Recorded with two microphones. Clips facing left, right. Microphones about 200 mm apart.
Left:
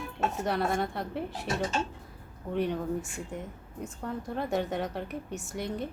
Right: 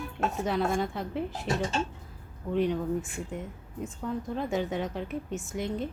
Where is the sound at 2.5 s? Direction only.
Centre (ahead or behind).